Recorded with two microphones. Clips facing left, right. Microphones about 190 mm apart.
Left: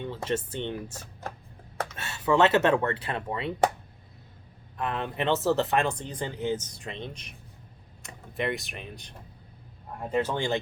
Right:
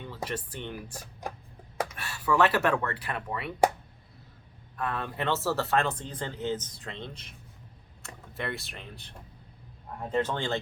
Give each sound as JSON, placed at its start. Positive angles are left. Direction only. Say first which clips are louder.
{"t": 0.3, "sound": "speech", "louder": "left 6 dB", "side_deg": 25}
{"t": 1.2, "sound": "chopping", "louder": "right 1 dB", "side_deg": -15}
{"t": 2.0, "sound": "speech", "louder": "left 3 dB", "side_deg": 25}
{"t": 4.8, "sound": "speech", "louder": "left 2 dB", "side_deg": 20}